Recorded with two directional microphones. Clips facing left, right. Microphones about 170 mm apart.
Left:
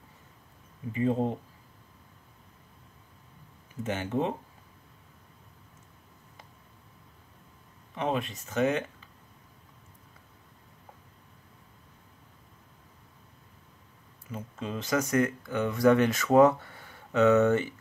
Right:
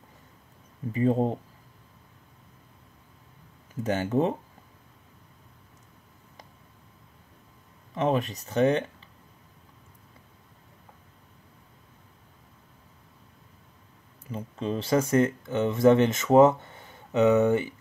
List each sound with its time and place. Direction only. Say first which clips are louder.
0.9 s speech: right 3 dB; 40° right (ahead or behind)
3.8 s speech: right 5 dB; 40° right (ahead or behind)
7.9 s speech: right 5 dB; 40° right (ahead or behind)
14.3 s speech: right 5 dB; 30° right (ahead or behind); by 17.7 s 15° right (ahead or behind)